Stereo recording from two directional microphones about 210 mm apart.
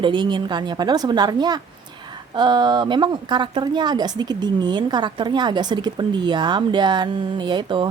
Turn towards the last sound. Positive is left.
turn(degrees=-25)  # may be behind; listen again after turning